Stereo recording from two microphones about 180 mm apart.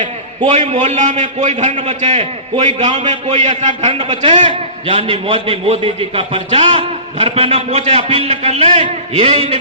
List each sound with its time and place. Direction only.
0.0 s a man's voice: 30° right (ahead or behind)
3.9 s a man's voice: 30° right (ahead or behind)